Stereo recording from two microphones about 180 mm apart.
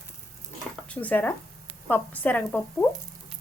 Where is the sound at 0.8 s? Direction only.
10° left (ahead or behind).